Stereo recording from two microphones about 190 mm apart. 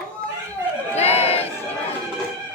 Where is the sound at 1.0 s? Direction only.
35° left (ahead or behind).